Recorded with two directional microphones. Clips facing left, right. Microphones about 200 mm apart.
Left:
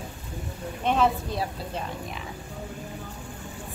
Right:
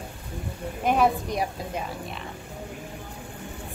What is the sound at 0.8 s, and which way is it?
A woman's voice, 10° right (ahead or behind).